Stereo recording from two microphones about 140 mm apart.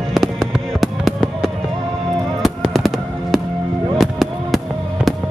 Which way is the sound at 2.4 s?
Centre (ahead or behind).